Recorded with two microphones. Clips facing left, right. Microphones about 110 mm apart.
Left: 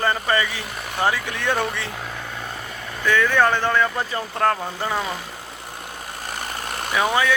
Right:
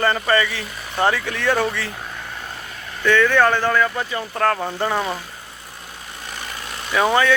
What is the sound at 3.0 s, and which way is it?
Speech, 10° left (ahead or behind).